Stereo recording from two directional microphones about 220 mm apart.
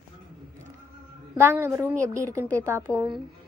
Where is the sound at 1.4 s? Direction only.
10° right (ahead or behind).